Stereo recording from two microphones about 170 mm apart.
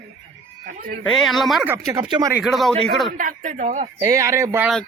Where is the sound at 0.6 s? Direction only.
60° right (ahead or behind).